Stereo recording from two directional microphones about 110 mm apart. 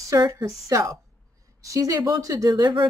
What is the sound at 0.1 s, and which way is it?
Speech, 30° right (ahead or behind).